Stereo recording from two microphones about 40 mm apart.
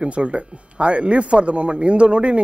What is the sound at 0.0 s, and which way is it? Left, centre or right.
Speech, right.